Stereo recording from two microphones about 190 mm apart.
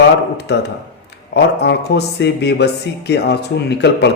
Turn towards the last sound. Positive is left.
turn(degrees=60)  # may be behind; listen again after turning